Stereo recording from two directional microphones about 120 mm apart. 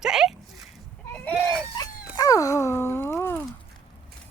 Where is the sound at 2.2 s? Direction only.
30° left (ahead or behind).